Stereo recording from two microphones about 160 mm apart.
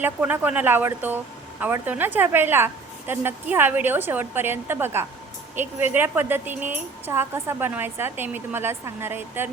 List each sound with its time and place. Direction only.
0.0 s speech: 10° right (ahead or behind)